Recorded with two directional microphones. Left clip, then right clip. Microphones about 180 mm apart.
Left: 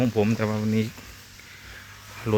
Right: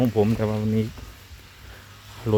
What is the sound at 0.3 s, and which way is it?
Speech, 10° right (ahead or behind).